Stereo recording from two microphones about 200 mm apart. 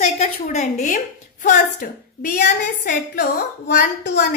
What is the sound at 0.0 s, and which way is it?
A woman's voice, 35° left (ahead or behind).